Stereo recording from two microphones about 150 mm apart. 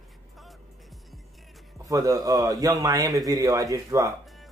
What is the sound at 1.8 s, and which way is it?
Speech, 20° right (ahead or behind).